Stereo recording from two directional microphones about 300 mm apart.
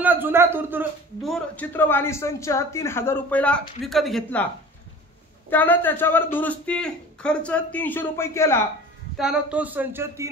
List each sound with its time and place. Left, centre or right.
0.0 s speech: centre
5.5 s speech: centre
9.1 s speech: centre